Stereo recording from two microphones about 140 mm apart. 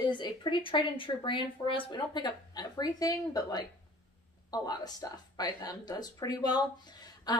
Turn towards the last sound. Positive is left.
turn(degrees=30)  # may be behind; listen again after turning